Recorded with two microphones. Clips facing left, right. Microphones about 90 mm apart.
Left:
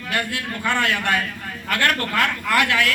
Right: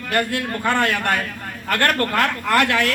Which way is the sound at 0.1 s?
45° right (ahead or behind).